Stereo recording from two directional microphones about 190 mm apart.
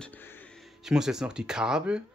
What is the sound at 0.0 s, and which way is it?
Music, 10° left (ahead or behind).